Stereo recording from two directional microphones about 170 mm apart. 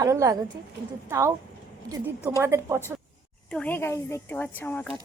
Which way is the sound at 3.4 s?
10° left (ahead or behind).